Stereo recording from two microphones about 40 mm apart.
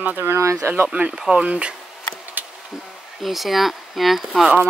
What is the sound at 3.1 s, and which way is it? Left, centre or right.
Speech, centre.